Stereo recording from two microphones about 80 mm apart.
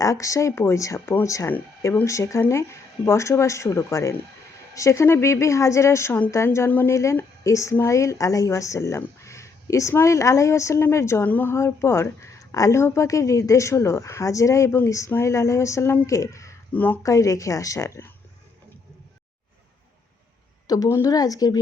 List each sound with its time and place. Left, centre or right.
0.0 s a woman's voice: left
6.7 s speech: left
6.9 s a woman's voice: left
16.7 s speech: left
17.0 s a woman's voice: left
20.7 s speech: left